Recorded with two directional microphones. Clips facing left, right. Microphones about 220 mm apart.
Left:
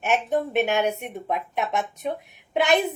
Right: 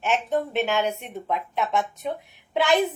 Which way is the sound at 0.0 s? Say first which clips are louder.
Left 1 dB; 15° left (ahead or behind).